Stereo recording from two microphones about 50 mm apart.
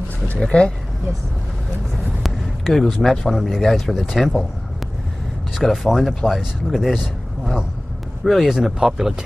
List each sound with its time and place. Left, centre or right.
0.5 s speech: centre
2.0 s vehicle: centre
3.0 s speech: centre
5.5 s speech: centre